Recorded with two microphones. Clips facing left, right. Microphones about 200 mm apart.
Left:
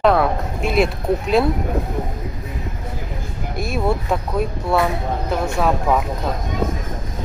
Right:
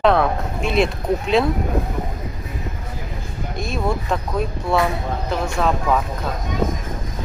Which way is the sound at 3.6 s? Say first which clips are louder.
Left 2 dB; 5° left (ahead or behind).